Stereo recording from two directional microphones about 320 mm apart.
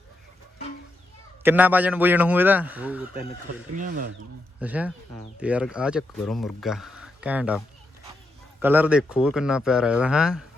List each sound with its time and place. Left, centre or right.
1.4 s speech: centre
3.8 s speech: right
4.6 s speech: centre
8.6 s speech: centre